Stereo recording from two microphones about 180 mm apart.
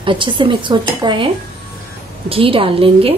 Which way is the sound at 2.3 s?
30° right (ahead or behind).